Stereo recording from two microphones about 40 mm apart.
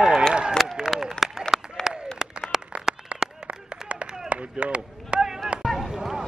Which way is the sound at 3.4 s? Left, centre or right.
Right.